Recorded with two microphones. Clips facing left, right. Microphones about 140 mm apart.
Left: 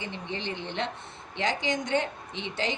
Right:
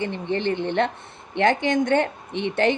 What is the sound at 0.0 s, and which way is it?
A woman's voice, 55° right (ahead or behind).